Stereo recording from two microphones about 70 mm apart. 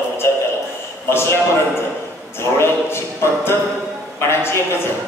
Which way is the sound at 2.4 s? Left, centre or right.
Left.